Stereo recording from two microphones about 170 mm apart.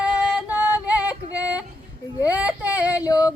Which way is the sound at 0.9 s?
10° right (ahead or behind).